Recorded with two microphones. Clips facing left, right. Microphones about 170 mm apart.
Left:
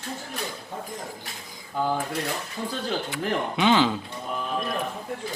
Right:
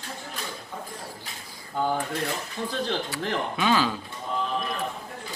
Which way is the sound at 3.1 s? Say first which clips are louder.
Left 2 dB; 20° left (ahead or behind).